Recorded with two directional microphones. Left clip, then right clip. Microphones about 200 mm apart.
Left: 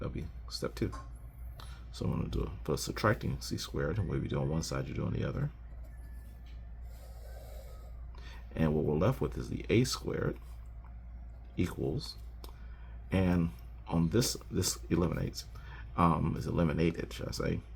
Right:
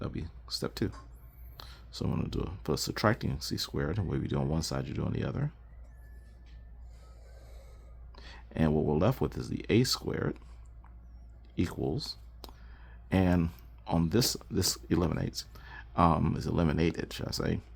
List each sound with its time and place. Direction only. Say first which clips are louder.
0.0 s a sound: right 2 dB; 45° right (ahead or behind)
1.5 s speech: right 3 dB; 45° right (ahead or behind)
8.1 s speech: right 3 dB; 45° right (ahead or behind)
11.5 s speech: right 2 dB; 40° right (ahead or behind)